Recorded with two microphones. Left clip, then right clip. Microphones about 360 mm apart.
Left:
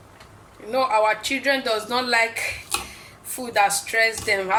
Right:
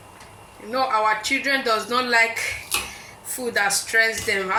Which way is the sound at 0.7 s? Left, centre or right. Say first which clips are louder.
Left 1 dB; left.